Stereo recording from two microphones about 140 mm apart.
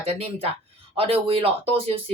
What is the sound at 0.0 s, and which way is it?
Speech, 45° right (ahead or behind).